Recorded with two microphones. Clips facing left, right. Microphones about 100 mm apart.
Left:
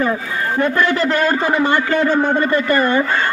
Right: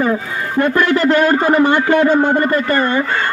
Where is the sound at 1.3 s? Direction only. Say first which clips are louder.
Right 4 dB; 50° right (ahead or behind).